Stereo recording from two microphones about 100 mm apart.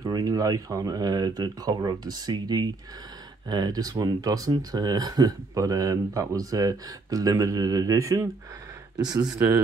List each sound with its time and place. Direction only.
0.0 s speech: 40° right (ahead or behind)